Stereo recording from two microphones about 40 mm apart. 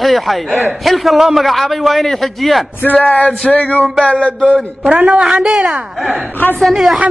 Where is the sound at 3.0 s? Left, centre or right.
Left.